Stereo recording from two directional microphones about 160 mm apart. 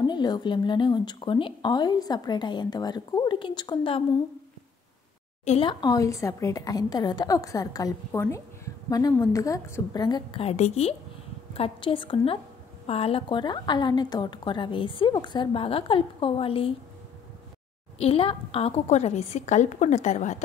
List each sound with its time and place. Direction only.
0.0 s a woman's voice: 25° left (ahead or behind)
5.4 s a woman's voice: 45° left (ahead or behind)
5.7 s a woman's voice: 25° left (ahead or behind)
10.5 s a woman's voice: 45° left (ahead or behind)
17.9 s a woman's voice: 40° left (ahead or behind)